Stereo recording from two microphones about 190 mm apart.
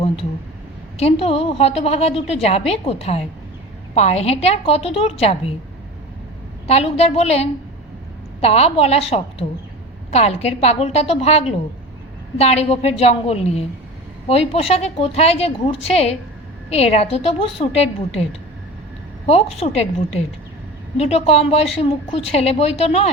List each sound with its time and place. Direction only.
0.9 s a woman's voice: 35° left (ahead or behind)
6.7 s a woman's voice: 35° left (ahead or behind)
19.2 s a woman's voice: 30° left (ahead or behind)